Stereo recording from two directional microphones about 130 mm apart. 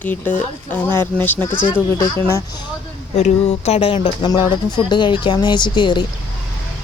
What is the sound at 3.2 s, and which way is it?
Speech, 55° left (ahead or behind).